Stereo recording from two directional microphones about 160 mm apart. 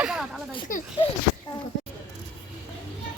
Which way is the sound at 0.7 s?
55° left (ahead or behind).